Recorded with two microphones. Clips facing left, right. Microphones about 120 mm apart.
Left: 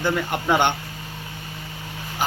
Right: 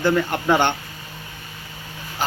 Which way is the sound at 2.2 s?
15° left (ahead or behind).